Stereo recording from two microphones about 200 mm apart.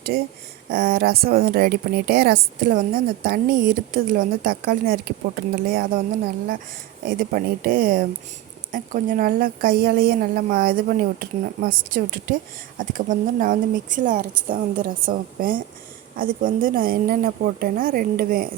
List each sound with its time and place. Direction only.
0.1 s a woman's voice: 45° right (ahead or behind)
7.0 s a woman's voice: 45° right (ahead or behind)